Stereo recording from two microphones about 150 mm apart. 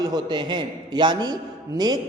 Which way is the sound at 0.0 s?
25° right (ahead or behind).